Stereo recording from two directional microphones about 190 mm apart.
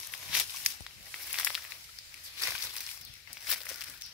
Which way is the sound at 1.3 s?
Centre (ahead or behind).